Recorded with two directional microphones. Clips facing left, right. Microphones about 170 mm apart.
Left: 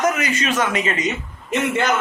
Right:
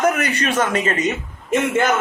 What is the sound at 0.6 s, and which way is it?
Speech, 45° right (ahead or behind).